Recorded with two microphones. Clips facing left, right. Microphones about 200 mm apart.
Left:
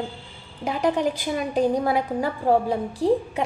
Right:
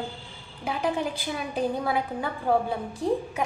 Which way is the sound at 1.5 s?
40° left (ahead or behind).